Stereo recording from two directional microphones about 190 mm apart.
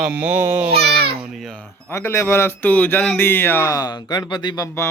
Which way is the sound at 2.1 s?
15° left (ahead or behind).